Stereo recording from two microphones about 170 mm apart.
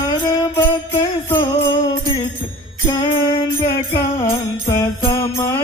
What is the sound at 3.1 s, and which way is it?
Music, 35° left (ahead or behind).